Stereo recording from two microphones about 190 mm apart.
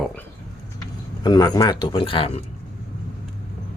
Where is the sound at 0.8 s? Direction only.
20° left (ahead or behind).